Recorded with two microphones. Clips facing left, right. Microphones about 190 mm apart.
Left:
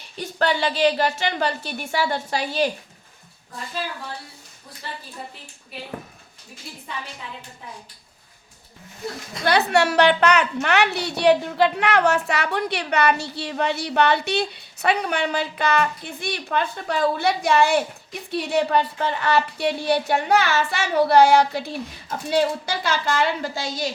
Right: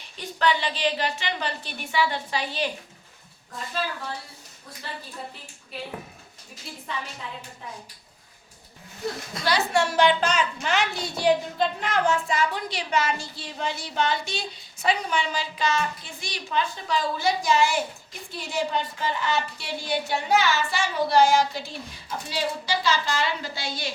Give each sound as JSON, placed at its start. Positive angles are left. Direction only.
{"t": 0.2, "sound": "a woman's voice", "side_deg": 45}
{"t": 9.4, "sound": "a woman's voice", "side_deg": 60}